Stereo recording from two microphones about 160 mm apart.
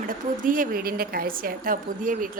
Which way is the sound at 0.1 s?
55° right (ahead or behind).